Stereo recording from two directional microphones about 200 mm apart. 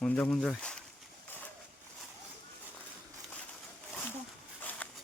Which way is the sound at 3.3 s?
5° left (ahead or behind).